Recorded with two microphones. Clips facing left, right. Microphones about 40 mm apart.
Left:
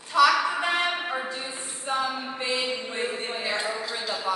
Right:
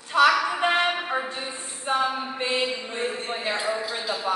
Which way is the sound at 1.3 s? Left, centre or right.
Right.